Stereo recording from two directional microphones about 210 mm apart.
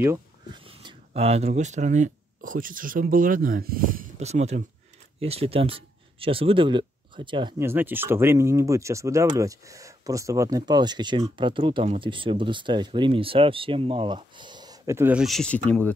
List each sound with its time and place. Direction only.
0.0 s speech: 10° right (ahead or behind)
0.7 s speech: 25° right (ahead or behind)
7.5 s speech: 10° right (ahead or behind); by 15.9 s 5° left (ahead or behind)